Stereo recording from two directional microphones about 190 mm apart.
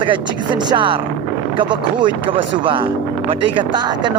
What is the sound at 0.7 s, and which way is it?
Speech, 25° right (ahead or behind).